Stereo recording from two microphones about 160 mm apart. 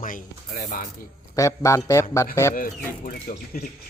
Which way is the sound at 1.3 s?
20° left (ahead or behind).